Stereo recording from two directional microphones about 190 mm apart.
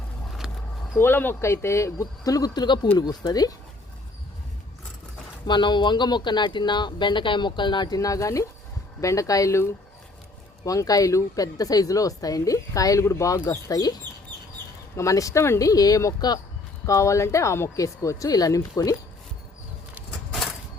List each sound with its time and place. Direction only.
0.9 s a woman's voice: 10° left (ahead or behind)
5.5 s a woman's voice: 25° left (ahead or behind)
10.7 s a woman's voice: 20° left (ahead or behind)
20.0 s a sound: centre (ahead or behind)